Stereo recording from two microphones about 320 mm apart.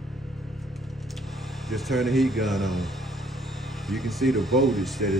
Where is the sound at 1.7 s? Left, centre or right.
Centre.